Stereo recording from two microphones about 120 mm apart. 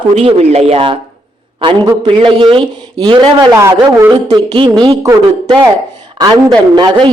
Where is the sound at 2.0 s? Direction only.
45° right (ahead or behind).